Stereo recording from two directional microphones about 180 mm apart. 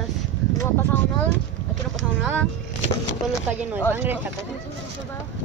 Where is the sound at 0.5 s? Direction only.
15° left (ahead or behind).